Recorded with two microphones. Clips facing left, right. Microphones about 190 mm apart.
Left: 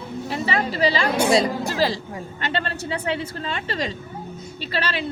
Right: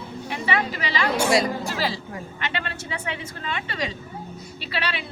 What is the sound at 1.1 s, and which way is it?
Speech, 25° left (ahead or behind).